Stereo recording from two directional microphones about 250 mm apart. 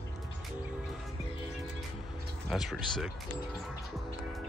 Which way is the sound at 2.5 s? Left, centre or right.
Centre.